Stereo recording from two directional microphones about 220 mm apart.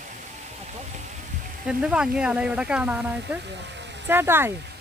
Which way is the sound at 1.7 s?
5° right (ahead or behind).